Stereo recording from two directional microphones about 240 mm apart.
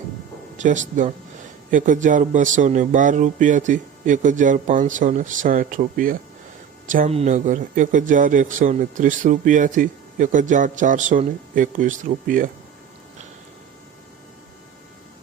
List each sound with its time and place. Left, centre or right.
0.5 s speech: right